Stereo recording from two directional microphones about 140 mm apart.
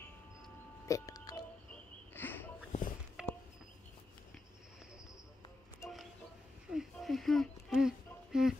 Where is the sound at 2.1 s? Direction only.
15° left (ahead or behind).